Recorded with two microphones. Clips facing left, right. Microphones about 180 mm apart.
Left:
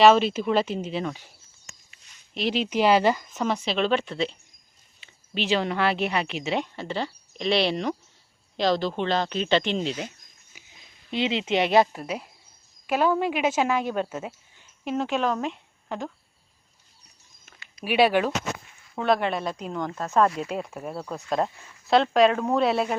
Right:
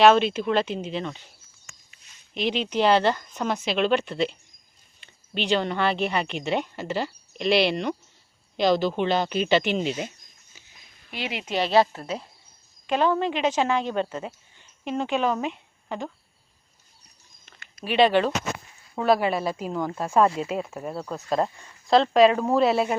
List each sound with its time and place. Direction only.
0.0 s speech: centre (ahead or behind)
2.3 s speech: centre (ahead or behind)
10.5 s a sound: 10° left (ahead or behind)
11.1 s a woman's voice: 20° left (ahead or behind); by 16.1 s centre (ahead or behind)
17.8 s speech: 10° left (ahead or behind)
18.9 s speech: 5° right (ahead or behind)